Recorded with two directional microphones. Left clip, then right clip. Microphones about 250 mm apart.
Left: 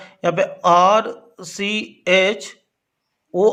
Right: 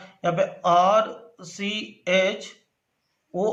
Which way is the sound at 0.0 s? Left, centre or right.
Left.